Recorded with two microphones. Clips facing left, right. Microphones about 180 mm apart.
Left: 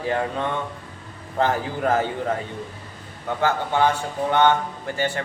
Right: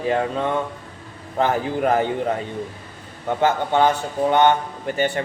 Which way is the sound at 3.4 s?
20° right (ahead or behind).